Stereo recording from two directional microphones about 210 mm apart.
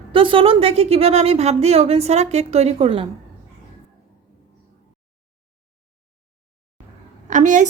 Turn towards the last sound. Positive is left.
turn(degrees=-35)  # may be behind; listen again after turning